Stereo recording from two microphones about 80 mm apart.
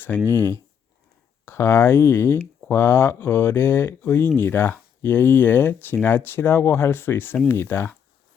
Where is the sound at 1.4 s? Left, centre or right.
Left.